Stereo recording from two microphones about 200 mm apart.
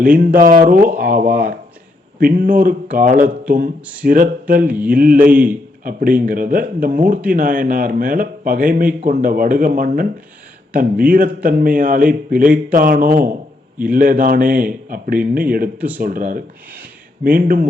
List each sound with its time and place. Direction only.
0.0 s speech: 45° right (ahead or behind)
4.6 s mantra: 10° right (ahead or behind)
4.9 s speech: 45° right (ahead or behind)